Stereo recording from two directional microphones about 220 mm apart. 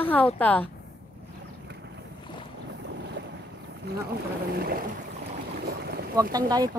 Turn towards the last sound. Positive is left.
turn(degrees=-15)  # may be behind; listen again after turning